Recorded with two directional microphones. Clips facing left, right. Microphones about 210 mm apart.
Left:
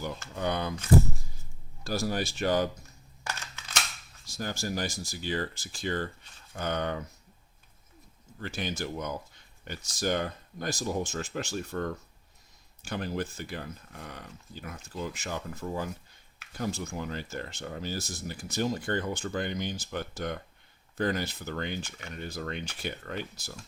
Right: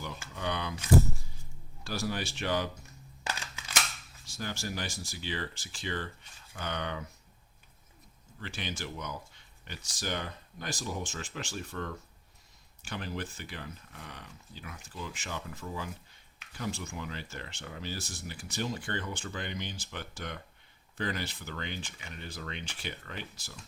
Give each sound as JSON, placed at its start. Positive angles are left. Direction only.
{"t": 0.3, "sound": "speech", "side_deg": 45}
{"t": 1.8, "sound": "speech", "side_deg": 40}
{"t": 4.4, "sound": "speech", "side_deg": 45}
{"t": 8.4, "sound": "speech", "side_deg": 45}